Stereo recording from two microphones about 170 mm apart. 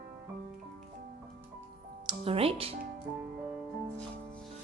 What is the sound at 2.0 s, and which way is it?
Speech, 35° right (ahead or behind).